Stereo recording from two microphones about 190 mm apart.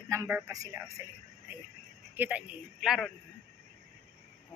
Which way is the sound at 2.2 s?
5° right (ahead or behind).